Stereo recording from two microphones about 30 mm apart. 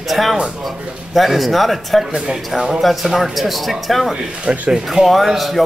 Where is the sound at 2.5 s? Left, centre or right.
Centre.